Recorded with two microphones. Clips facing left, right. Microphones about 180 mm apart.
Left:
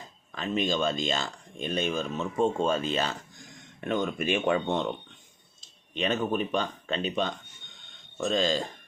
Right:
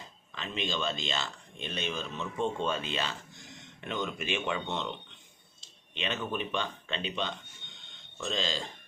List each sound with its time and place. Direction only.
0.3 s speech: 45° left (ahead or behind)